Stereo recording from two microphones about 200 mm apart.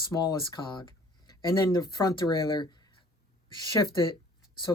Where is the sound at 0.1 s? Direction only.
20° left (ahead or behind).